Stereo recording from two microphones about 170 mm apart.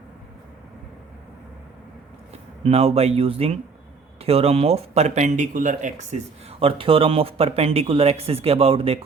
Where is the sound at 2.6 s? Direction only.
35° right (ahead or behind).